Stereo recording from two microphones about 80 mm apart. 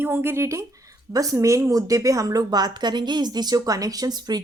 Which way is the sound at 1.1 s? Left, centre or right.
Right.